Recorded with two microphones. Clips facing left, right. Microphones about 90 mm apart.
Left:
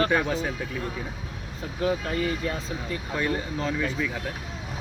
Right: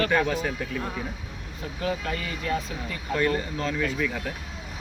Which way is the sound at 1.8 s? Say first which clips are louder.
Left 4 dB; 30° left (ahead or behind).